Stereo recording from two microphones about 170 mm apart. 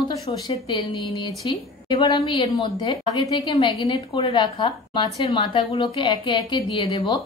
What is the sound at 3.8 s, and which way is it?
A woman's voice, 20° left (ahead or behind).